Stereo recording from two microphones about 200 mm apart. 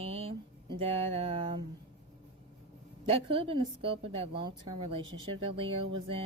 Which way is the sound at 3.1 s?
25° right (ahead or behind).